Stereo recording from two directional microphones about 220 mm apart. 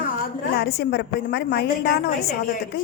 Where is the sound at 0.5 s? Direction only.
45° left (ahead or behind).